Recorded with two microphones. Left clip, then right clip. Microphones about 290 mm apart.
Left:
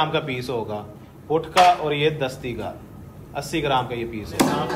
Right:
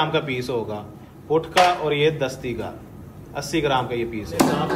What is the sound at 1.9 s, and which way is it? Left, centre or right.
Speech, centre.